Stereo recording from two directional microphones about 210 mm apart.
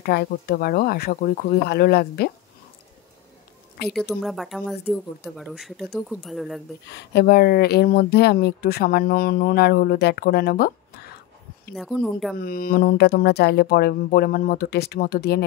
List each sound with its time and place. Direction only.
0.0 s speech: 50° left (ahead or behind)
3.8 s a woman's voice: 50° left (ahead or behind)
4.1 s speech: centre (ahead or behind)
7.0 s speech: 50° left (ahead or behind)
11.7 s speech: centre (ahead or behind)
12.4 s speech: 45° left (ahead or behind)